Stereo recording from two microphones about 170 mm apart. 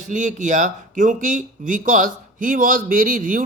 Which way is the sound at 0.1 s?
50° right (ahead or behind).